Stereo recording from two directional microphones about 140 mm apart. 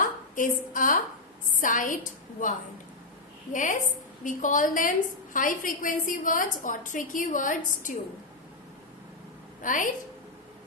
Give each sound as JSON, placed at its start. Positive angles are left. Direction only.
{"t": 0.0, "sound": "a woman's voice", "side_deg": 70}
{"t": 9.6, "sound": "a woman's voice", "side_deg": 70}